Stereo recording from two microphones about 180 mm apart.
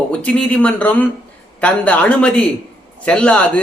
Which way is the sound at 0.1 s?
5° left (ahead or behind).